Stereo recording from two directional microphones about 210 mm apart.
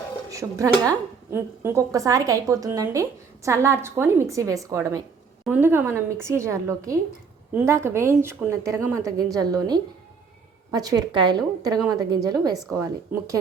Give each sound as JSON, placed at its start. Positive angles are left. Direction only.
{"t": 0.3, "sound": "a woman's voice", "side_deg": -15}